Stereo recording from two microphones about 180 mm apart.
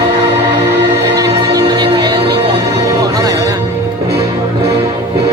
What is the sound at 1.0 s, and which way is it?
Music, 20° right (ahead or behind).